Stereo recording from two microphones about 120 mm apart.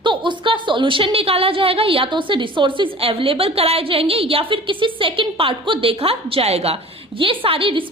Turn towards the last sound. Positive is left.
turn(degrees=-50)  # may be behind; listen again after turning